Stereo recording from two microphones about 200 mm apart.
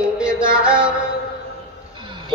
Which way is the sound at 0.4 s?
5° right (ahead or behind).